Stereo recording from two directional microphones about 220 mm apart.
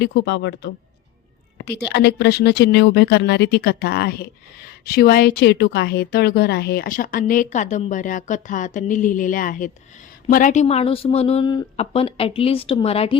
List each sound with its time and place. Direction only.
0.0 s a woman's voice: 50° left (ahead or behind); by 13.1 s 25° left (ahead or behind)